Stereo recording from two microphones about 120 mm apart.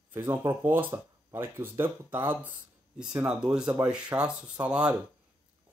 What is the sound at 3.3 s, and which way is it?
Speech, 5° right (ahead or behind).